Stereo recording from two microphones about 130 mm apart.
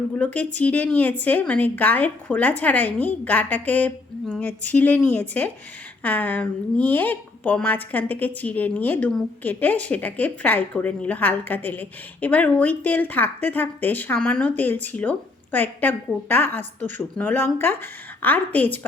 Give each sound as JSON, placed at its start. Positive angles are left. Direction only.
{"t": 0.2, "sound": "speech", "side_deg": 10}